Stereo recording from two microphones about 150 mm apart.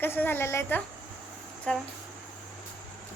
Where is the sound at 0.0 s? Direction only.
15° left (ahead or behind).